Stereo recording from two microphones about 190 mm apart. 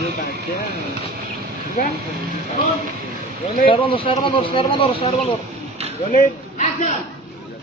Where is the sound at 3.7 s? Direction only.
25° left (ahead or behind).